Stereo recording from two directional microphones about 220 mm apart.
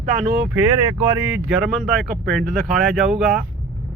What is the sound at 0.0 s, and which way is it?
Speech, 40° right (ahead or behind).